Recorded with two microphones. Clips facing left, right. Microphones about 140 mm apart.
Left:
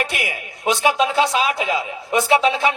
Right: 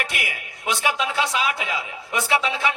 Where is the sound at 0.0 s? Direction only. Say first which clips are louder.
Left 5 dB; 30° left (ahead or behind).